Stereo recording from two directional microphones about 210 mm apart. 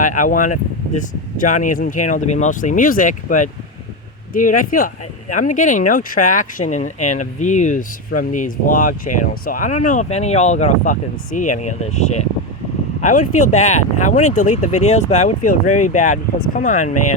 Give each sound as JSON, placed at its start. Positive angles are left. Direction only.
{"t": 0.0, "sound": "speech", "side_deg": 40}